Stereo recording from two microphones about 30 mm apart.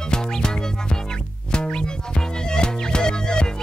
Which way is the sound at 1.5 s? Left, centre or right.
Left.